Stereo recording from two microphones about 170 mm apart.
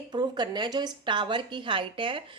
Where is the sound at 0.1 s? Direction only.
25° right (ahead or behind).